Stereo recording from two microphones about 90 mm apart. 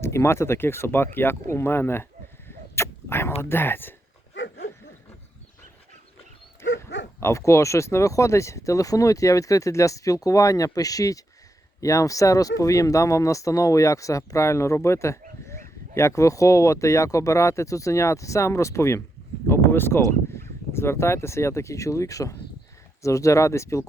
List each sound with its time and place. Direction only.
0.0 s speech: 30° left (ahead or behind)
2.7 s a sound: 30° left (ahead or behind)
3.5 s speech: 25° left (ahead or behind)
6.6 s speech: 30° left (ahead or behind)